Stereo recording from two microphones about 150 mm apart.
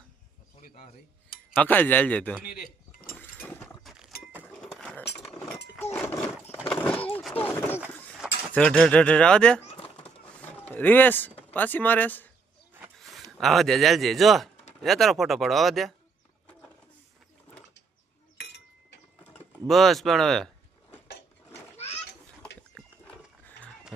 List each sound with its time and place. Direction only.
1.5 s speech: 10° left (ahead or behind)
2.4 s speech: 80° left
3.4 s a sound: 10° left (ahead or behind)
5.9 s roaring cats: 15° left (ahead or behind)
6.7 s a sound: 10° left (ahead or behind)
7.4 s speech: 40° left (ahead or behind)
8.5 s speech: 5° left (ahead or behind)
13.0 s a sound: centre (ahead or behind)
13.4 s speech: centre (ahead or behind)
18.3 s chink: 90° left
19.6 s speech: centre (ahead or behind)